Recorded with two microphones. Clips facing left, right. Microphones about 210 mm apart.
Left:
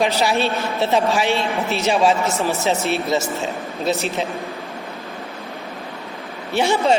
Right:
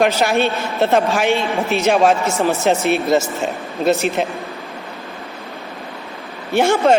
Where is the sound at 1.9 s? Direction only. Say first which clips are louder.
Right 3 dB; 50° right (ahead or behind).